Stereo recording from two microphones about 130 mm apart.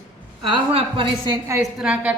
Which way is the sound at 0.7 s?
45° right (ahead or behind).